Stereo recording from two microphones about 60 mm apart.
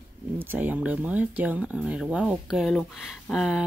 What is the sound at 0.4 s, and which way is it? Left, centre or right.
Speech, right.